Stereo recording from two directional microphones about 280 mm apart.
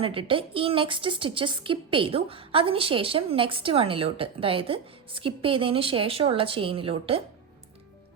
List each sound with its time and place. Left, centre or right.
0.0 s a woman's voice: centre